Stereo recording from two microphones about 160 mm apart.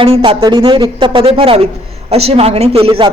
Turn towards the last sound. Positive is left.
turn(degrees=-35)  # may be behind; listen again after turning